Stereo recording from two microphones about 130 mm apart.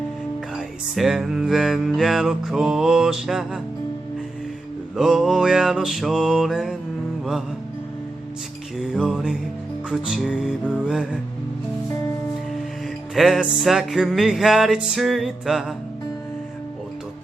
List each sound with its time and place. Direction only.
0.5 s music: centre (ahead or behind)
4.9 s music: 5° right (ahead or behind)
8.8 s music: 5° right (ahead or behind)
13.1 s music: centre (ahead or behind)